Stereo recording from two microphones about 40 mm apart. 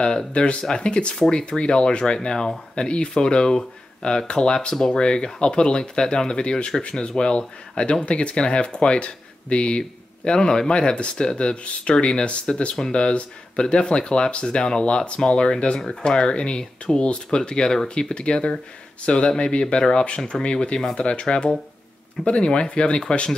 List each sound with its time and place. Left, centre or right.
0.0 s speech: left
1.1 s speech: centre
1.4 s speech: left